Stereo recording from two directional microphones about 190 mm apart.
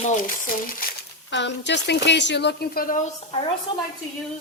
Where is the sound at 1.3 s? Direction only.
65° left (ahead or behind); by 3.0 s 50° left (ahead or behind).